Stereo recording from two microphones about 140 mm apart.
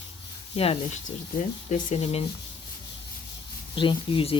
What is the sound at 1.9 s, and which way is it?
Speech, 50° left (ahead or behind).